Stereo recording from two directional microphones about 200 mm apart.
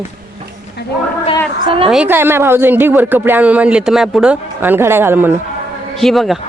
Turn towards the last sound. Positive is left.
turn(degrees=0)  # may be behind; listen again after turning